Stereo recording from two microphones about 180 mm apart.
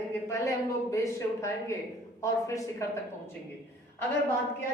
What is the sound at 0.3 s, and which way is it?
A woman's voice, 15° left (ahead or behind).